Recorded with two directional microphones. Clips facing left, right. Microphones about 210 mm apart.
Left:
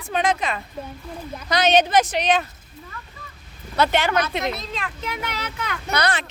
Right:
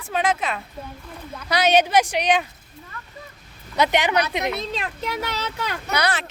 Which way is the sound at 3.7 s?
15° right (ahead or behind).